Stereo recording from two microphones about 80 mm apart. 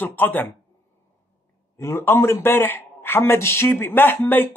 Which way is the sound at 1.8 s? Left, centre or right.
Left.